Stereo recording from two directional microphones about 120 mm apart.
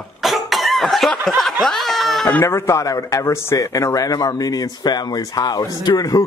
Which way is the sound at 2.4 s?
20° left (ahead or behind).